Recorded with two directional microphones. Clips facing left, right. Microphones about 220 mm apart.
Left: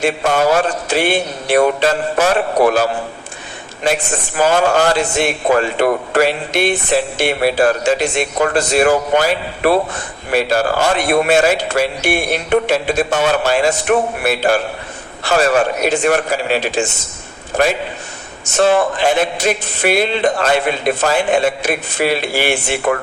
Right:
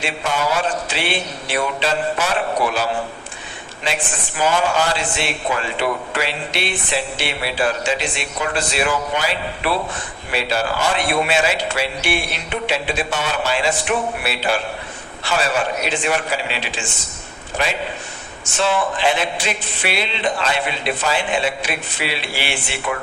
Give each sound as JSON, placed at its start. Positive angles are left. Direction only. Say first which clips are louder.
{"t": 0.0, "sound": "a man's voice", "louder": "left 8 dB", "side_deg": 50}
{"t": 4.4, "sound": "a man's voice", "louder": "left 5 dB", "side_deg": 50}